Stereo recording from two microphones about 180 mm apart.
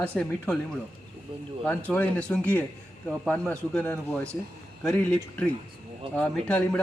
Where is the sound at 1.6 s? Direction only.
5° left (ahead or behind).